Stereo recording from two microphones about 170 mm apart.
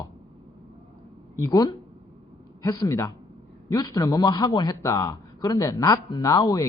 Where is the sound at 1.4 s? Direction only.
20° left (ahead or behind).